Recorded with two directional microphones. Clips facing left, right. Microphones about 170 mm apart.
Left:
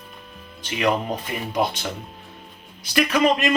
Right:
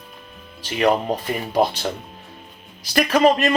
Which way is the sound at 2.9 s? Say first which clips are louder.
Right 3 dB; 40° right (ahead or behind).